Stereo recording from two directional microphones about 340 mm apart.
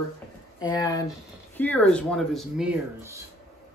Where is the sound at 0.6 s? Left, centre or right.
Centre.